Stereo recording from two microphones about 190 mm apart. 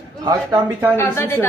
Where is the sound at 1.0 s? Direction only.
10° left (ahead or behind).